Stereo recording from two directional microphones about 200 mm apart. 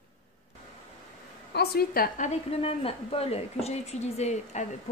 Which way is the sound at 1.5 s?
50° left (ahead or behind).